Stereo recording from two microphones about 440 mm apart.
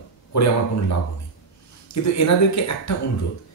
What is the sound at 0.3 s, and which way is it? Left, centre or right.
Speech, left.